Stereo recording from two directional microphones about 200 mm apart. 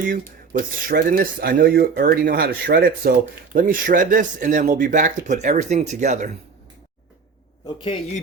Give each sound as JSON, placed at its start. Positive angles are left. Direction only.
{"t": 0.0, "sound": "speech", "side_deg": -40}